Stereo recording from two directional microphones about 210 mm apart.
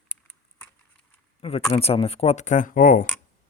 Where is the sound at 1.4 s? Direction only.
30° left (ahead or behind).